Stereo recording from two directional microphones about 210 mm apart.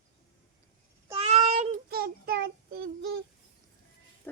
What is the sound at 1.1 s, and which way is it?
Child singing, 30° right (ahead or behind).